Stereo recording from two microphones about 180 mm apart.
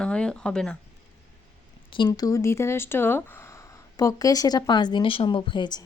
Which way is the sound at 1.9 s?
25° left (ahead or behind).